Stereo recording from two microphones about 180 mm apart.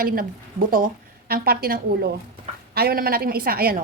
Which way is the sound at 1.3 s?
55° right (ahead or behind).